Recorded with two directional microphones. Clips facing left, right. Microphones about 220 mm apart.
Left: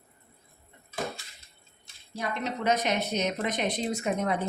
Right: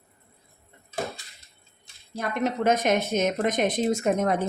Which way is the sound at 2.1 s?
50° right (ahead or behind).